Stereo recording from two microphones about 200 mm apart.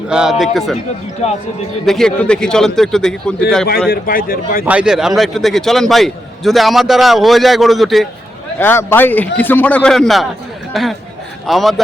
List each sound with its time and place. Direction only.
0.1 s a man's voice: 5° right (ahead or behind)
1.2 s speech: 30° left (ahead or behind)
1.9 s a man's voice: 5° left (ahead or behind)
3.8 s speech: 45° left (ahead or behind)
4.6 s a man's voice: 5° right (ahead or behind)
8.5 s a man's voice: 10° left (ahead or behind)